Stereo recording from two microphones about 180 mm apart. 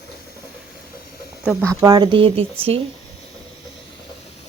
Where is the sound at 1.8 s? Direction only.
25° right (ahead or behind).